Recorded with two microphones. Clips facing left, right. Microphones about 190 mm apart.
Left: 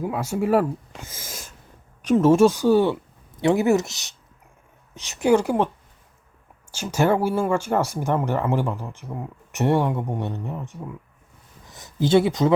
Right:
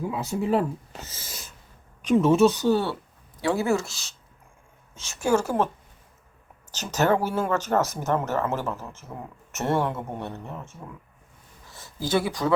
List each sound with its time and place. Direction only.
0.2 s speech: 10° left (ahead or behind)
6.7 s speech: 10° left (ahead or behind)